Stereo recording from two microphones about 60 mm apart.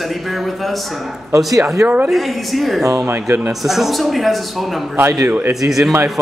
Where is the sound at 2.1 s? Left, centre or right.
Centre.